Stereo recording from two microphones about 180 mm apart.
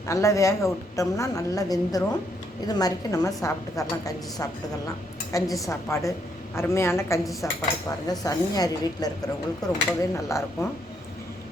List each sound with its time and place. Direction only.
0.1 s a woman's voice: 15° left (ahead or behind)